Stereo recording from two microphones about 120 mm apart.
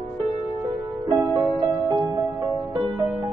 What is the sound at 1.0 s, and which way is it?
Music, 35° right (ahead or behind).